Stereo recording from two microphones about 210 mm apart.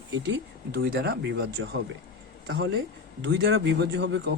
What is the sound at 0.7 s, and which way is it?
A man's voice, 45° right (ahead or behind).